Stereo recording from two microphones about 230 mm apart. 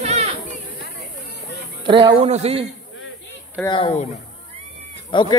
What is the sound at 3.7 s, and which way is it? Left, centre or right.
Speech, left.